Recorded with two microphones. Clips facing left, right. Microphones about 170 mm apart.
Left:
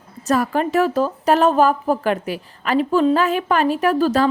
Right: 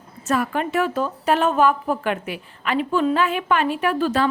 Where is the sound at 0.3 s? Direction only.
35° left (ahead or behind).